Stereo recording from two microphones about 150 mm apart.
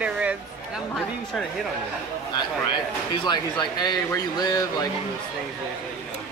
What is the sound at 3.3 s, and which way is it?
Speech, 30° left (ahead or behind).